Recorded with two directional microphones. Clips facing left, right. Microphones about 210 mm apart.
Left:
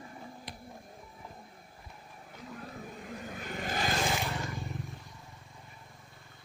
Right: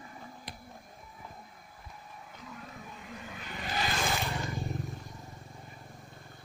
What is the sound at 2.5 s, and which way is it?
Vehicle, 40° left (ahead or behind).